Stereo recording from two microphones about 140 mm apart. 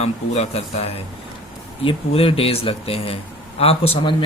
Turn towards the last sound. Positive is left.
turn(degrees=45)  # may be behind; listen again after turning